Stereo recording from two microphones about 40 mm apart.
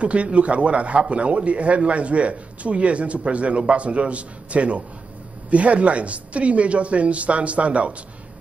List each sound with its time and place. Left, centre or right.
0.0 s a man's voice: right